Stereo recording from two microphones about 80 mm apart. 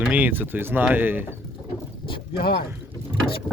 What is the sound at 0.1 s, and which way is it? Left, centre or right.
Speech, right.